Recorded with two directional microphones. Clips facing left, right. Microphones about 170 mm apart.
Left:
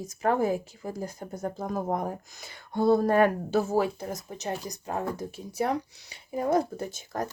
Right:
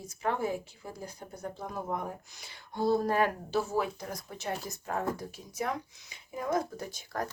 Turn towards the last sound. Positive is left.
turn(degrees=20)  # may be behind; listen again after turning